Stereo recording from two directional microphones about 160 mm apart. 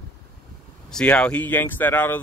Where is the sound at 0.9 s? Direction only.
5° left (ahead or behind).